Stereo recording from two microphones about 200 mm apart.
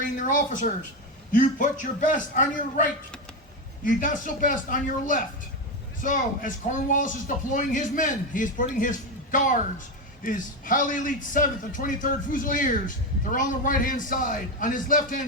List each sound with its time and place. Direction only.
0.0 s speech: 40° left (ahead or behind)